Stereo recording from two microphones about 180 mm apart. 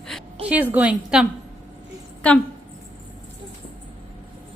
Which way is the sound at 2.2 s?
5° left (ahead or behind).